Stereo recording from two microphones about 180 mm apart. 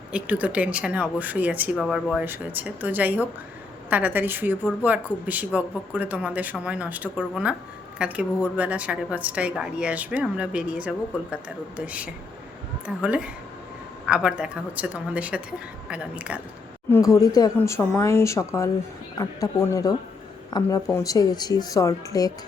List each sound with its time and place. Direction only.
0.1 s a woman's voice: 10° right (ahead or behind)
16.9 s speech: 20° left (ahead or behind)